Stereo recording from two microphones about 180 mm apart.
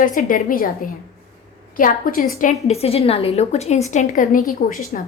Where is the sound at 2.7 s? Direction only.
35° left (ahead or behind).